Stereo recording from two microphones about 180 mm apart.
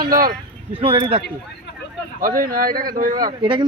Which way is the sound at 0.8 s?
30° right (ahead or behind).